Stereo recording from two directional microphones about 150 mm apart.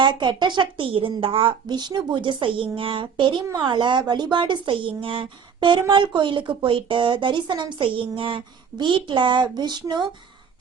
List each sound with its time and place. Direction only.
0.0 s a woman's voice: 30° right (ahead or behind)